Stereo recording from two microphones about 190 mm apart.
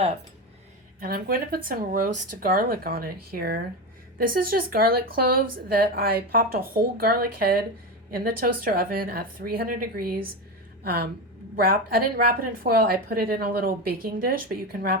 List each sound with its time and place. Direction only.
0.9 s a woman's voice: 50° right (ahead or behind)